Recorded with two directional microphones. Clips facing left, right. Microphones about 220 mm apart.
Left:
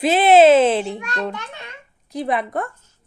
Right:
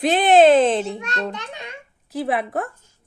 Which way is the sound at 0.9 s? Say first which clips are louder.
Left 1 dB; 20° right (ahead or behind).